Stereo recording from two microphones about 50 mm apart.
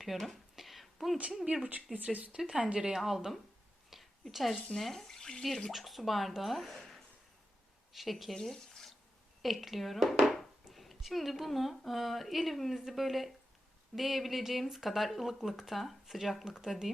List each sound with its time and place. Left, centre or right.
0.0 s speech: centre
0.5 s a sound: centre
1.7 s speech: right
2.3 s speech: centre
2.9 s speech: centre
4.3 s speech: centre
8.4 s speech: centre